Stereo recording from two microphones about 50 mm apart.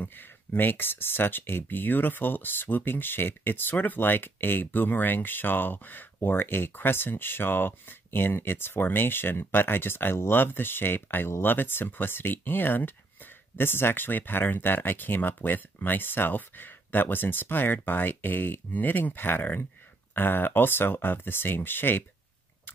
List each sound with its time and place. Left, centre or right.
0.0 s speech: left